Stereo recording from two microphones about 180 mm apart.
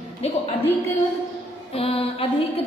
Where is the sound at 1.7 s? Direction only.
30° left (ahead or behind).